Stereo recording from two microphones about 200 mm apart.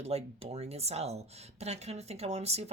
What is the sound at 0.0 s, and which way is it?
Speech, 30° right (ahead or behind).